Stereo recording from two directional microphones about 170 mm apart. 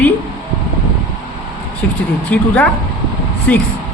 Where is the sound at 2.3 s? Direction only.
10° left (ahead or behind).